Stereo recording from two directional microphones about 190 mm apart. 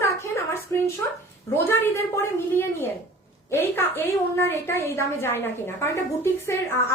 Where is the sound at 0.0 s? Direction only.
15° left (ahead or behind).